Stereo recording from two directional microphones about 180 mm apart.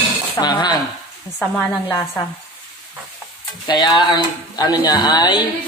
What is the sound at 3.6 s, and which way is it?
Speech, 25° left (ahead or behind).